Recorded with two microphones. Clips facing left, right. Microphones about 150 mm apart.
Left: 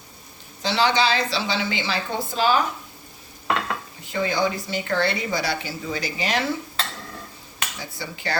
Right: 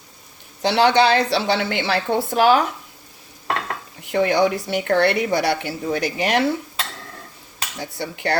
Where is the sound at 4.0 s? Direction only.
70° right (ahead or behind).